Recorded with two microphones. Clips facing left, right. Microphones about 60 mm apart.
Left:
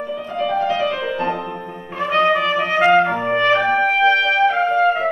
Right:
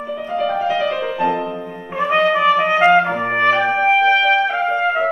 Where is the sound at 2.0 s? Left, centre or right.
Centre.